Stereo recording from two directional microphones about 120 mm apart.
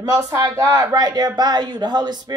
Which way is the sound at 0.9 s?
35° right (ahead or behind).